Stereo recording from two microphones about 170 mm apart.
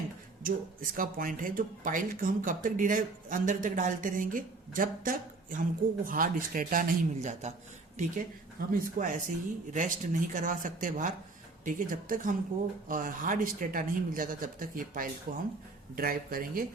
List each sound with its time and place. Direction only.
0.4 s a man's voice: 55° right (ahead or behind)